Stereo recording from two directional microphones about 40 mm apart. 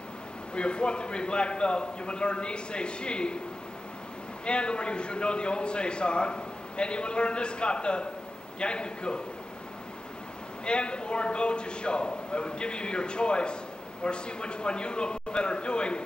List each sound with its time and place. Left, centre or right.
0.6 s a man's voice: left
4.5 s a man's voice: left
10.6 s a man's voice: left